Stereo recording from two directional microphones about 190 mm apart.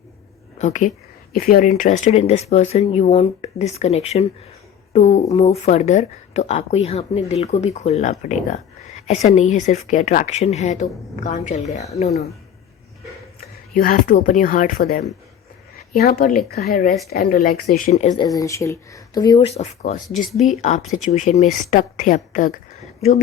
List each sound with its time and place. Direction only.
0.6 s speech: 40° left (ahead or behind)
1.7 s speech: 40° left (ahead or behind)
13.7 s speech: 45° left (ahead or behind)
18.2 s speech: 20° left (ahead or behind)
19.5 s speech: 35° left (ahead or behind)
23.0 s speech: 35° left (ahead or behind)